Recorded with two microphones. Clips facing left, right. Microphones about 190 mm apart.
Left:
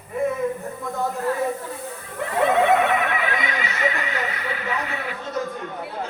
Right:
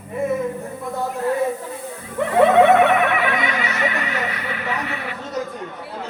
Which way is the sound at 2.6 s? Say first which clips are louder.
Right 5 dB; 65° right (ahead or behind).